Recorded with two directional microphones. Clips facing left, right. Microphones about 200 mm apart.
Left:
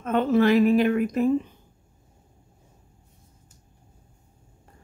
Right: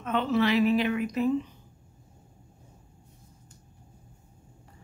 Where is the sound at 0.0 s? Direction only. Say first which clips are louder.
Left 5 dB; 45° left (ahead or behind).